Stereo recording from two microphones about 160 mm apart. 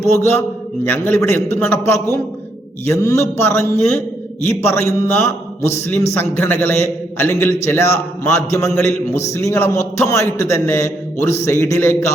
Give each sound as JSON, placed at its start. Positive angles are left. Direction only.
{"t": 0.2, "sound": "a man's voice", "side_deg": 15}